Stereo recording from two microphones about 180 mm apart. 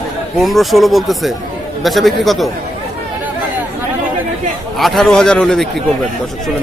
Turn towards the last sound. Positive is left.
turn(degrees=5)  # may be behind; listen again after turning